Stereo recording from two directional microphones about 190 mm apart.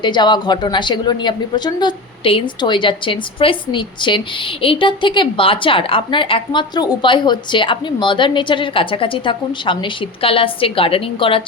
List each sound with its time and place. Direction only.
0.0 s a woman's voice: 25° left (ahead or behind)